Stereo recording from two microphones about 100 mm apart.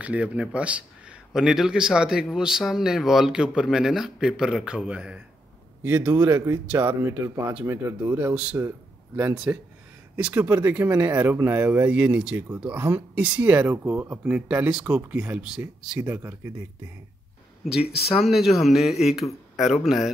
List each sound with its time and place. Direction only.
0.0 s a man's voice: 15° right (ahead or behind)
9.3 s speech: 10° right (ahead or behind)
18.2 s speech: centre (ahead or behind)